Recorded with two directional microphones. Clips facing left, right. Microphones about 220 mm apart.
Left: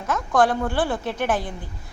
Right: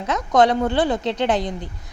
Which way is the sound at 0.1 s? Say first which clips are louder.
Right 3 dB; 20° right (ahead or behind).